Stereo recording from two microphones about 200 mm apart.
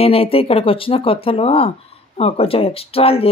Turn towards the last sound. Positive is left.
turn(degrees=30)  # may be behind; listen again after turning